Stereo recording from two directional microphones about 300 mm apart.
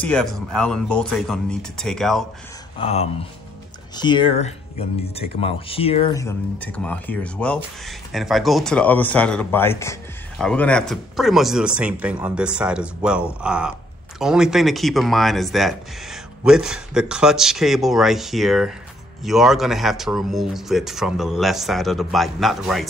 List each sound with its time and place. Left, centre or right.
0.0 s speech: centre
2.8 s speech: centre